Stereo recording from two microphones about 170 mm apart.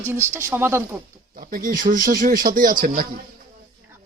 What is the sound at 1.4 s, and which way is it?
Speech, 55° right (ahead or behind).